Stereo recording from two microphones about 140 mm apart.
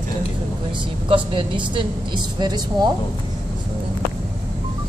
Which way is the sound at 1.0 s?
35° right (ahead or behind).